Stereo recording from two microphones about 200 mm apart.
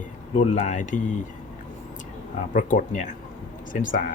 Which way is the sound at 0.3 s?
35° left (ahead or behind).